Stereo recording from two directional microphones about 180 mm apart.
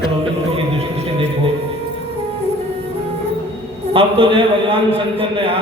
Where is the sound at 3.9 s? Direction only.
30° right (ahead or behind).